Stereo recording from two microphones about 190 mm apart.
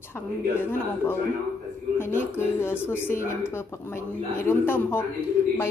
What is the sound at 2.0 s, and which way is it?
A man's voice, 10° left (ahead or behind).